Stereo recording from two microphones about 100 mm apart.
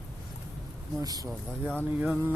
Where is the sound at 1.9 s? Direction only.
15° right (ahead or behind).